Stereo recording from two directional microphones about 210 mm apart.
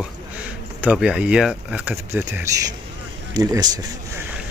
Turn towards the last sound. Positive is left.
turn(degrees=-20)  # may be behind; listen again after turning